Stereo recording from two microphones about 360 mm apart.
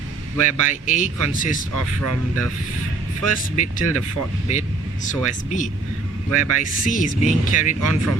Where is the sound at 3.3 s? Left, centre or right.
Left.